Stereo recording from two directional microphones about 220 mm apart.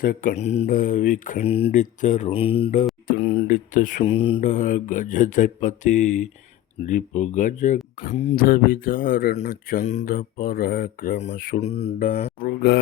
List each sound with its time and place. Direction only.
0.0 s speech: 40° left (ahead or behind)
4.4 s speech: 35° left (ahead or behind)
8.4 s speech: 40° left (ahead or behind)